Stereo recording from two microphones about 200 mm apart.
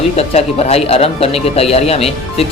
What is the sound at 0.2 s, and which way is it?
Speech, 30° left (ahead or behind).